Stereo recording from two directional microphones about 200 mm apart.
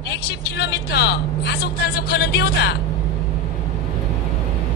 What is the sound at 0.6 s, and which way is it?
Speech, 55° left (ahead or behind).